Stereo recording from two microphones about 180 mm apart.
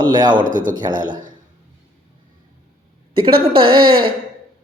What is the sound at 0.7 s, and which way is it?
Speech, 25° right (ahead or behind).